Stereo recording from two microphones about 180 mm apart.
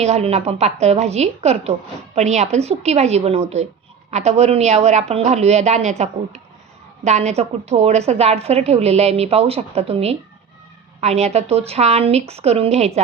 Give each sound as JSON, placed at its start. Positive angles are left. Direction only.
{"t": 0.0, "sound": "a woman's voice", "side_deg": -35}